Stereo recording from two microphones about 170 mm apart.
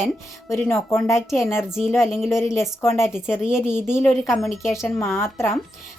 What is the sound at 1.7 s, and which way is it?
Speech, 5° right (ahead or behind).